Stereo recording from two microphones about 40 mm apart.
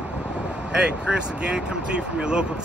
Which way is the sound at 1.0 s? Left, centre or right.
Right.